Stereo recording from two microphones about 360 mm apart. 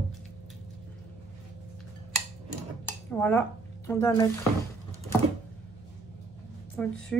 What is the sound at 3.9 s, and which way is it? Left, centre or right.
Speech, centre.